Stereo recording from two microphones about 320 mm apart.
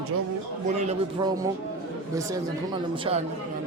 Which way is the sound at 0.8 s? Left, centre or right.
Right.